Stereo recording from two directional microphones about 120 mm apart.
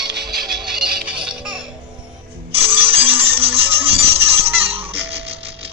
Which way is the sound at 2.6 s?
50° right (ahead or behind).